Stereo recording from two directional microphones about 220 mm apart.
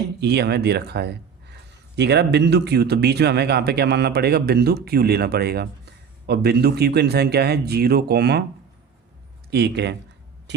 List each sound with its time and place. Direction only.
0.2 s speech: 50° right (ahead or behind)
9.5 s speech: 50° right (ahead or behind)